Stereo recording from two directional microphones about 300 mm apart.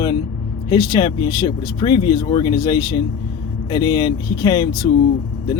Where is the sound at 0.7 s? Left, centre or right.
Centre.